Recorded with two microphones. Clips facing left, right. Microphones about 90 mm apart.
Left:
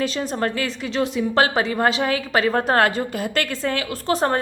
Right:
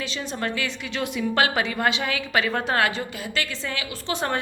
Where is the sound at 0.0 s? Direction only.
45° left (ahead or behind).